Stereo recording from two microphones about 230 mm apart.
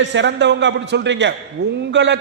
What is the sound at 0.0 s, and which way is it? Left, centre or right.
A man's voice, right.